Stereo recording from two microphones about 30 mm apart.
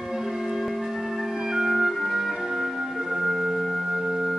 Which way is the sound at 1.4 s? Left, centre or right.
Centre.